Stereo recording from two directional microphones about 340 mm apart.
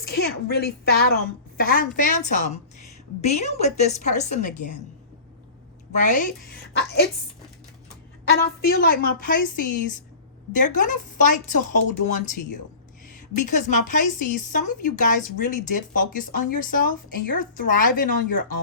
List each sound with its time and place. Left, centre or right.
0.1 s a woman's voice: left
5.9 s speech: left
8.3 s speech: left
10.5 s speech: left